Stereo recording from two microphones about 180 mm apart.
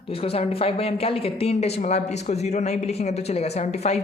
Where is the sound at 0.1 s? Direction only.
30° left (ahead or behind).